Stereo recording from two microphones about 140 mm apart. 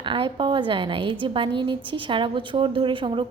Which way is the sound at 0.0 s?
35° right (ahead or behind).